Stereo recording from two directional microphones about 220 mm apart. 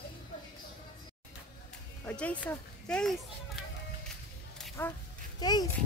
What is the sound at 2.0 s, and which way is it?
A child's voice, 5° left (ahead or behind).